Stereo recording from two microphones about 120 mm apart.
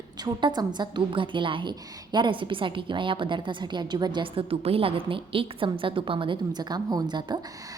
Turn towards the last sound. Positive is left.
turn(degrees=-35)  # may be behind; listen again after turning